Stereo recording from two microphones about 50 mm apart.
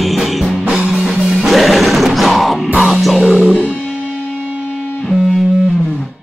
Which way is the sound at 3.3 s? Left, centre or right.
Right.